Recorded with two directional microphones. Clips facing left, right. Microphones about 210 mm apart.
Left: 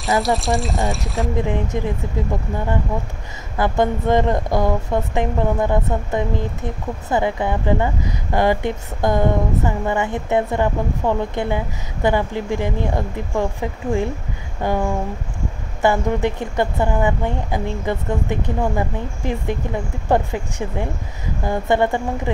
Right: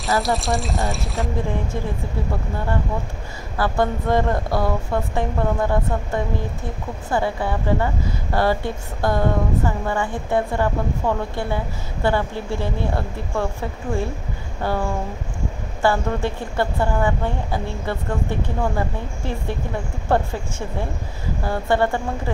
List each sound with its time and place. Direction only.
0.2 s speech: centre (ahead or behind)
1.4 s speech: 20° left (ahead or behind)
3.5 s a woman's voice: 20° left (ahead or behind)